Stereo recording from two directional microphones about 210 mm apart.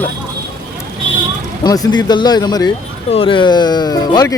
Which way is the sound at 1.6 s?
20° left (ahead or behind).